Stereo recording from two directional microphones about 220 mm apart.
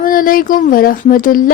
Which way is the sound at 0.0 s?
40° left (ahead or behind).